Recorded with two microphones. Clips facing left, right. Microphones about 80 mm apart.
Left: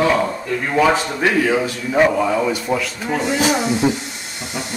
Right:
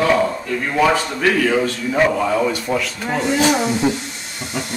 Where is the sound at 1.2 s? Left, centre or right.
Left.